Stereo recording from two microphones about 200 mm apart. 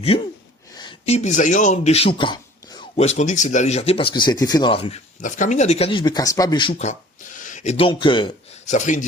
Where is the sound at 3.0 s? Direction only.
35° left (ahead or behind).